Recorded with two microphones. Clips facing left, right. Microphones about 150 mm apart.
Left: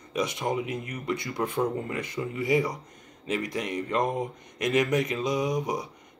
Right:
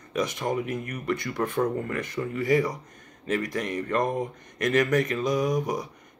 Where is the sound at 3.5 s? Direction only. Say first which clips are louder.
Left 1 dB; 15° left (ahead or behind).